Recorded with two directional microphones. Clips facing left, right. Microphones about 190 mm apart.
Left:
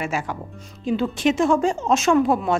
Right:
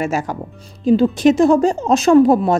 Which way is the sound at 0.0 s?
40° right (ahead or behind).